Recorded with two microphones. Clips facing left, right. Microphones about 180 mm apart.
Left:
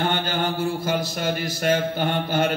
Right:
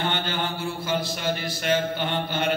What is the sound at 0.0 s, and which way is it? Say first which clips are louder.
Mantra: left 4 dB; 45° left (ahead or behind).